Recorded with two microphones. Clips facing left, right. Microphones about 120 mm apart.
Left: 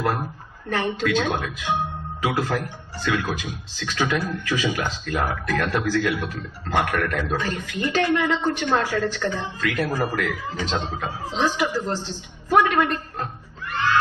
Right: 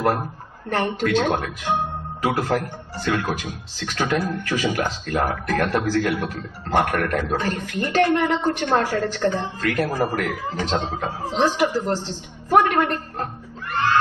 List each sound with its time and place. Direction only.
0.7 s a man's voice: 45° right (ahead or behind)
12.4 s chuckle: 45° right (ahead or behind)